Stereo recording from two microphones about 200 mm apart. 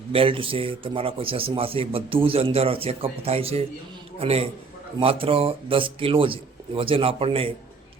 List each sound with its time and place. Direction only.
0.1 s a man's voice: 25° right (ahead or behind)